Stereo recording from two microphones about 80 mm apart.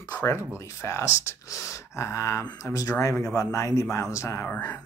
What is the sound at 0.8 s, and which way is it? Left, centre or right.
Speech, left.